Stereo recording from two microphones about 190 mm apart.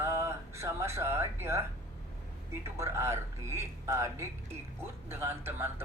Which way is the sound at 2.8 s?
15° right (ahead or behind).